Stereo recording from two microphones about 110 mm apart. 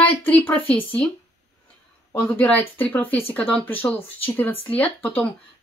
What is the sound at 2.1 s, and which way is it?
Speech, 15° left (ahead or behind).